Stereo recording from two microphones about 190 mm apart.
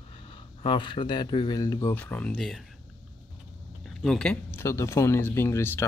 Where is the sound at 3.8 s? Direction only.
Centre (ahead or behind).